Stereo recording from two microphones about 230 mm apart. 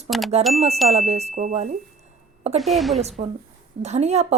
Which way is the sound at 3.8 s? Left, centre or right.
Right.